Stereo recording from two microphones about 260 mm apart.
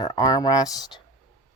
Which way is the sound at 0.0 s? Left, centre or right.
Centre.